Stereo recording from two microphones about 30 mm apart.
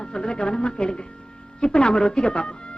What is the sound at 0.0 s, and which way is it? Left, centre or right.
Speech, left.